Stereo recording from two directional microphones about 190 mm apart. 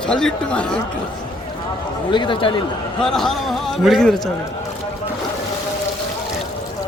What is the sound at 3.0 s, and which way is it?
A man's voice, centre (ahead or behind).